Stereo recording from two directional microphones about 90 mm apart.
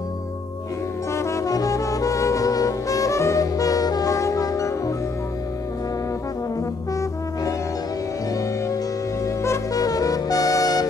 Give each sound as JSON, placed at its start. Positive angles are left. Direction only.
{"t": 1.1, "sound": "music", "side_deg": 35}
{"t": 9.2, "sound": "music", "side_deg": 35}